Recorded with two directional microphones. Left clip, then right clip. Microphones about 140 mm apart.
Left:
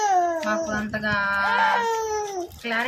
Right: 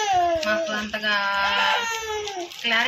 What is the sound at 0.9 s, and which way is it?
Speech, 35° left (ahead or behind).